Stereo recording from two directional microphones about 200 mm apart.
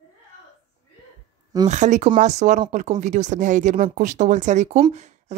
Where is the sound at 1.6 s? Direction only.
40° right (ahead or behind).